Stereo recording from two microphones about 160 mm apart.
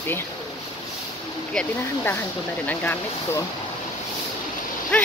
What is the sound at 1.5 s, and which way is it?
Speech, 5° left (ahead or behind).